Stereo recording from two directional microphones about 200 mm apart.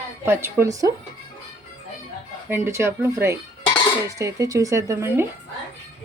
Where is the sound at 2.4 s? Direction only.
10° right (ahead or behind).